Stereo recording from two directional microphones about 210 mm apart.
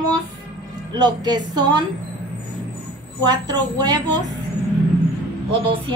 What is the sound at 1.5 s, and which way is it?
Speech, 20° right (ahead or behind).